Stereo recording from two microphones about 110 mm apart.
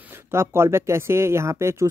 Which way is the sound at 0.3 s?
25° right (ahead or behind).